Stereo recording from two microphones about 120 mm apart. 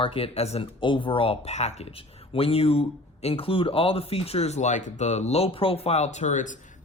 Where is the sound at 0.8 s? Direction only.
45° left (ahead or behind).